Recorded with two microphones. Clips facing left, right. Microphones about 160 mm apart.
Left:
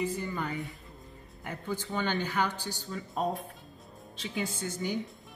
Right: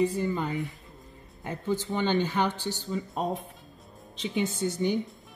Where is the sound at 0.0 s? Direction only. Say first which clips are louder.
Right 6 dB; 25° right (ahead or behind).